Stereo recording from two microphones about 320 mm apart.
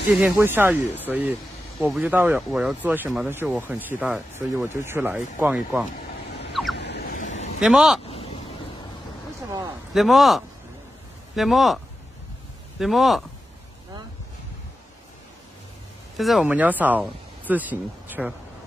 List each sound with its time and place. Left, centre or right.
0.1 s speech: centre
6.8 s a sound: left
7.6 s speech: centre
8.1 s a sound: centre
9.9 s speech: centre
16.2 s speech: centre